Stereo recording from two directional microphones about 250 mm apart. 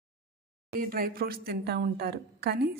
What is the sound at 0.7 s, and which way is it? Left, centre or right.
A woman's voice, right.